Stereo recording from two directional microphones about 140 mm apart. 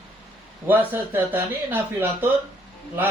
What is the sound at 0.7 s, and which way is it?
Speech, 15° right (ahead or behind).